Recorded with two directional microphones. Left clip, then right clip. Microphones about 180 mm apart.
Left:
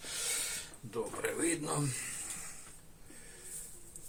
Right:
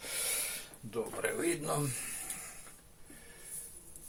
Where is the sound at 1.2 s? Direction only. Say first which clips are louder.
Right 1 dB; 35° right (ahead or behind).